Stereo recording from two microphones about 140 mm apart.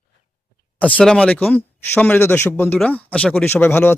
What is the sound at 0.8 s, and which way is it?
Speech, 10° left (ahead or behind).